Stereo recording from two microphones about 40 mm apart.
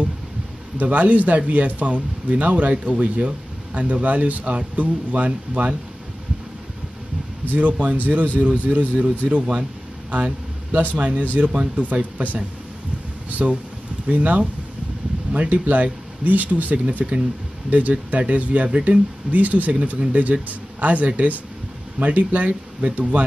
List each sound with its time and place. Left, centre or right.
0.7 s speech: right
7.4 s a man's voice: right